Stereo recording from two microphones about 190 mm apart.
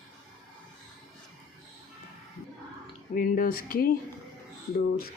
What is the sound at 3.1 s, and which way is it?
Speech, 45° left (ahead or behind).